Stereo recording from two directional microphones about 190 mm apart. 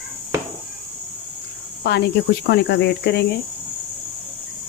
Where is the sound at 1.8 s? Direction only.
60° left (ahead or behind).